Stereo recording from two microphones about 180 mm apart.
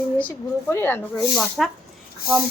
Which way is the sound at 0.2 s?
10° left (ahead or behind).